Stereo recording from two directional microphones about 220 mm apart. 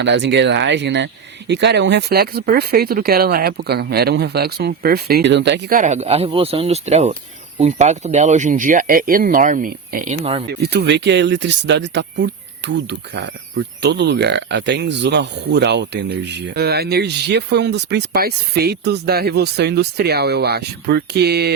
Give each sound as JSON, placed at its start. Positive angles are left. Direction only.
{"t": 0.0, "sound": "speech", "side_deg": -55}
{"t": 10.5, "sound": "speech", "side_deg": -50}